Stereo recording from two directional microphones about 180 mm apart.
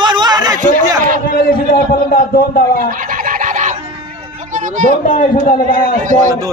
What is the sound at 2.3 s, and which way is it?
Speech, 55° left (ahead or behind).